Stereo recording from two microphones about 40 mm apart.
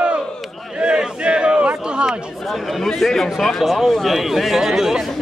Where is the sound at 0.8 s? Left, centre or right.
Right.